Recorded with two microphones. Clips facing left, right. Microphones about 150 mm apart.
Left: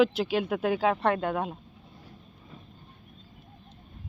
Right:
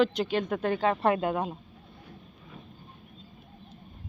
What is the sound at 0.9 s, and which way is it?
Speech, 5° right (ahead or behind).